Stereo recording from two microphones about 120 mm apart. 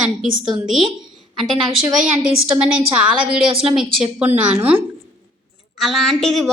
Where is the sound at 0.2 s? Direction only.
5° right (ahead or behind).